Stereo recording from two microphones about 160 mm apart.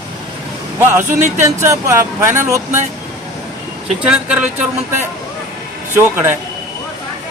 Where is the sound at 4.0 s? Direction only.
10° right (ahead or behind).